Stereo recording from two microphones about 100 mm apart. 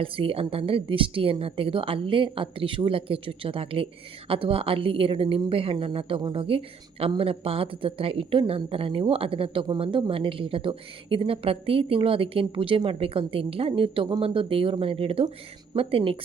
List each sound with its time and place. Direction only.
0.0 s speech: 65° right (ahead or behind)